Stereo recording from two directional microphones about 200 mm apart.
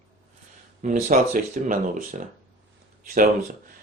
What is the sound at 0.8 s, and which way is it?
Speech, 40° right (ahead or behind).